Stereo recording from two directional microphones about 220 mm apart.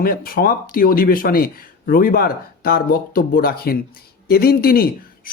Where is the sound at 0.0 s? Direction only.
40° left (ahead or behind).